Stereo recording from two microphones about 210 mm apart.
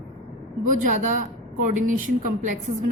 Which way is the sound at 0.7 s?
35° right (ahead or behind).